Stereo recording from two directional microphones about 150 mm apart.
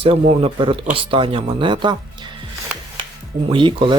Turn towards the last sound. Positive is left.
turn(degrees=-35)  # may be behind; listen again after turning